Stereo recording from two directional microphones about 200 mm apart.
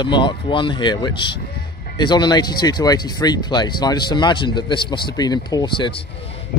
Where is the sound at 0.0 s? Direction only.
25° left (ahead or behind).